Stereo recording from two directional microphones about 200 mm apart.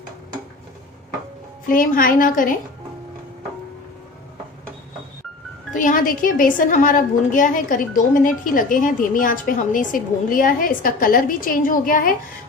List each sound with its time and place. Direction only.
1.7 s a woman's voice: 45° left (ahead or behind)
5.7 s a woman's voice: 40° left (ahead or behind)